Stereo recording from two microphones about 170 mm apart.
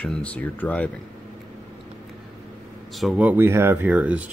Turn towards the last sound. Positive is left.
turn(degrees=-10)  # may be behind; listen again after turning